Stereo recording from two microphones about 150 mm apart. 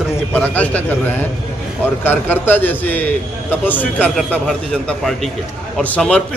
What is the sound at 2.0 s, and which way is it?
A man's voice, 10° left (ahead or behind).